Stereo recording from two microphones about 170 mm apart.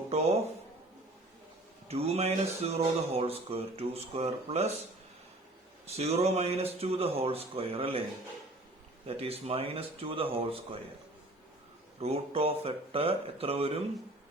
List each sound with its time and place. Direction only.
0.1 s a man's voice: 40° right (ahead or behind)
1.9 s speech: 35° right (ahead or behind)
5.8 s speech: 40° right (ahead or behind)
9.0 s speech: 35° right (ahead or behind)
11.9 s speech: 35° right (ahead or behind)